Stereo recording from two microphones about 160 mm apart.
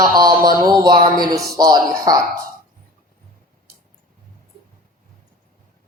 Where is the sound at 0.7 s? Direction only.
30° right (ahead or behind).